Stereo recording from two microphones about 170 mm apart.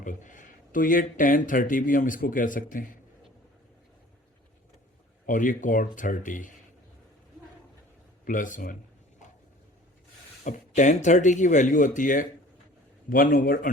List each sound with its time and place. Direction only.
0.0 s speech: 50° left (ahead or behind)
5.2 s speech: 50° left (ahead or behind)
8.2 s speech: 50° left (ahead or behind)
10.4 s a man's voice: 45° left (ahead or behind)